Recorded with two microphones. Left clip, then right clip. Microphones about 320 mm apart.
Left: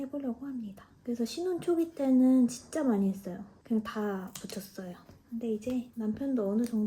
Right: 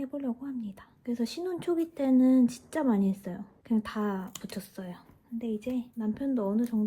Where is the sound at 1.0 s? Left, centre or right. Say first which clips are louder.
Even; right.